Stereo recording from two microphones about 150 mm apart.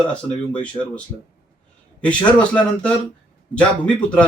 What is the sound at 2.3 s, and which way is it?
Speech, 5° left (ahead or behind).